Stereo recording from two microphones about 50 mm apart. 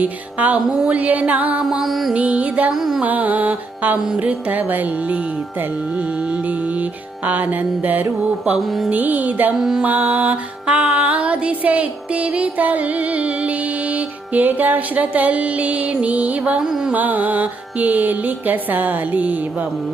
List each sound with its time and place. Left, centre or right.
0.0 s music: right
1.8 s music: centre
2.1 s music: right
2.7 s music: centre
3.0 s music: right
7.3 s music: right
8.5 s music: centre
8.9 s music: right
16.6 s music: centre
16.9 s music: right